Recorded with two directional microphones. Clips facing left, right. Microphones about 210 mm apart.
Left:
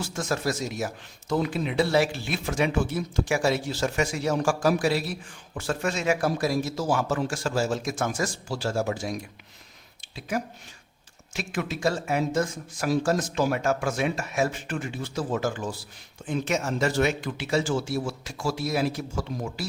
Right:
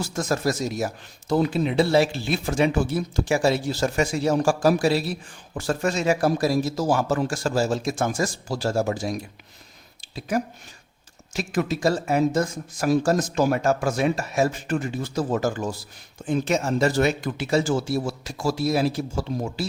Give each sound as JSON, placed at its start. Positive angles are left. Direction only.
{"t": 0.0, "sound": "speech", "side_deg": -40}